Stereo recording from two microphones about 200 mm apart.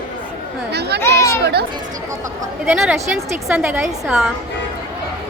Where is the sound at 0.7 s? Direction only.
55° right (ahead or behind).